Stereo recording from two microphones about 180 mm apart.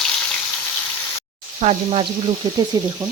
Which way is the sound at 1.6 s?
30° right (ahead or behind).